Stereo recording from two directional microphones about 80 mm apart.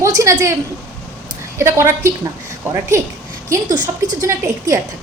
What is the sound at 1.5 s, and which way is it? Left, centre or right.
Speech, right.